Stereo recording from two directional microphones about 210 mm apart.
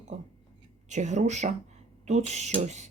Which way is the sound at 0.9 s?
35° right (ahead or behind).